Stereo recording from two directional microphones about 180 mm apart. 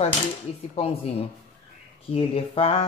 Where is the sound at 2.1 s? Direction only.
30° left (ahead or behind).